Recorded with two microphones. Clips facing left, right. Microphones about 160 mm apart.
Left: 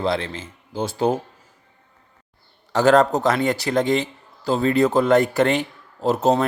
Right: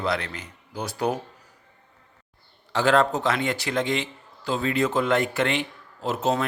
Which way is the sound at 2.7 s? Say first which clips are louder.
Left 5 dB; 40° left (ahead or behind).